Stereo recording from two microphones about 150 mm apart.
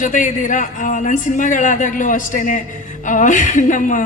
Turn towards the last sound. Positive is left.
turn(degrees=60)  # may be behind; listen again after turning